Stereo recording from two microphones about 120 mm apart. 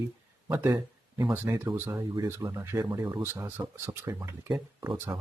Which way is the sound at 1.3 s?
20° right (ahead or behind).